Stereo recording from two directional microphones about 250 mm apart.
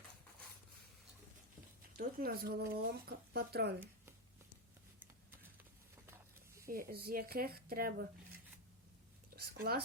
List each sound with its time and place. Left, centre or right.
2.0 s speech: right
6.1 s snake: centre
6.7 s speech: right
9.3 s a sound: right